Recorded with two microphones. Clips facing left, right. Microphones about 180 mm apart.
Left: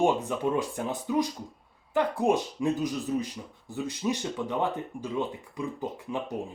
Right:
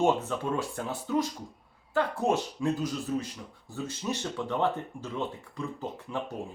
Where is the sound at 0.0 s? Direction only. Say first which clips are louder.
Left 1 dB; 15° left (ahead or behind).